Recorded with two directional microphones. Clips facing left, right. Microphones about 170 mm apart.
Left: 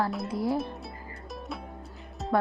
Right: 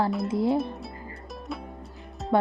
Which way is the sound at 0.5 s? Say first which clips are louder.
Right 4 dB; centre (ahead or behind).